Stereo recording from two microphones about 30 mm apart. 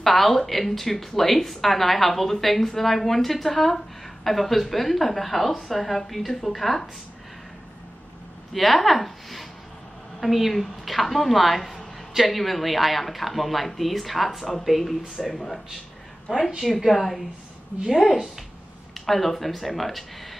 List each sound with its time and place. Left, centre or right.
0.0 s speech: centre
8.5 s speech: centre
16.3 s a woman's voice: centre
16.6 s speech: centre